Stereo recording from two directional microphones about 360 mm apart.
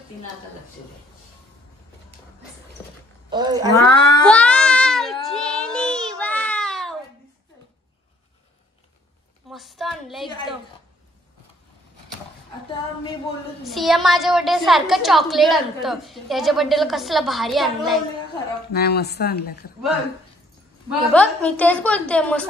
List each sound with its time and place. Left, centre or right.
3.3 s a woman's voice: centre
3.7 s cat: centre
5.3 s child singing: centre
9.5 s a woman's voice: centre
10.2 s a woman's voice: centre
13.7 s a woman's voice: centre
18.7 s speech: left
21.1 s a woman's voice: centre